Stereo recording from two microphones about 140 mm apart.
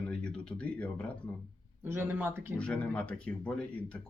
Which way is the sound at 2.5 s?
10° left (ahead or behind).